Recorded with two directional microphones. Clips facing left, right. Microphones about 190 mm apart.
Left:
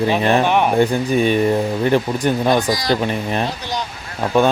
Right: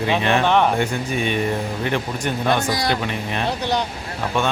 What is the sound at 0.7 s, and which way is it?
Speech, 35° left (ahead or behind).